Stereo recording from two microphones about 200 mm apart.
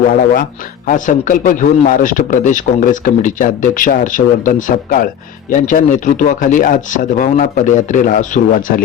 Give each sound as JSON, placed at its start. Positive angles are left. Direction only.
{"t": 0.9, "sound": "a man's voice", "side_deg": 40}